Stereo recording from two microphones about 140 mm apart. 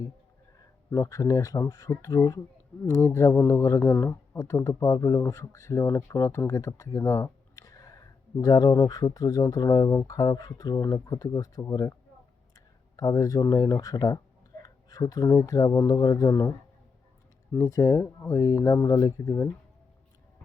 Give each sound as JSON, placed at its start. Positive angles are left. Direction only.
{"t": 0.9, "sound": "speech", "side_deg": 20}
{"t": 17.5, "sound": "speech", "side_deg": 20}